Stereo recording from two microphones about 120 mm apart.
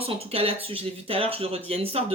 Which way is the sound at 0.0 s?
55° right (ahead or behind).